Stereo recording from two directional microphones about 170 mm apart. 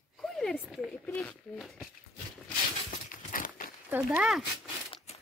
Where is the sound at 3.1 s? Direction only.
55° left (ahead or behind).